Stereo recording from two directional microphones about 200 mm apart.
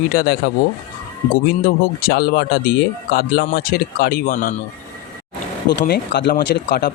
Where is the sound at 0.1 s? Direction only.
50° left (ahead or behind).